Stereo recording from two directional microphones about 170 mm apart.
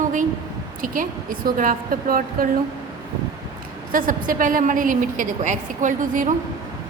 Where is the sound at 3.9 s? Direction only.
55° right (ahead or behind).